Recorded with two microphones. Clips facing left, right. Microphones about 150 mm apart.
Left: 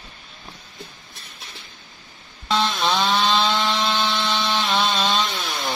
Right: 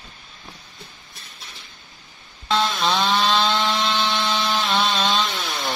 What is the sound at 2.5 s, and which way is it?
Wood, centre (ahead or behind).